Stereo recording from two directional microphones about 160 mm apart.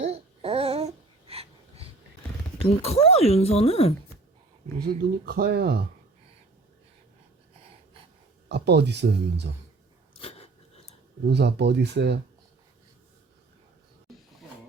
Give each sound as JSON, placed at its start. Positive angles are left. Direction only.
{"t": 0.0, "sound": "babbling", "side_deg": -40}
{"t": 1.3, "sound": "wheeze", "side_deg": -40}
{"t": 2.6, "sound": "speech", "side_deg": 40}
{"t": 4.8, "sound": "speech", "side_deg": -70}
{"t": 8.4, "sound": "speech", "side_deg": -90}
{"t": 10.2, "sound": "a sound", "side_deg": 40}
{"t": 11.3, "sound": "speech", "side_deg": -90}